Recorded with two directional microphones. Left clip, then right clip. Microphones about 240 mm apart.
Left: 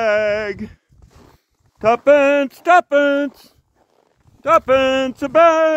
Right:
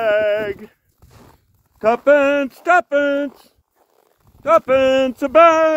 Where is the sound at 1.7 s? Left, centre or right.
Centre; by 3.5 s left.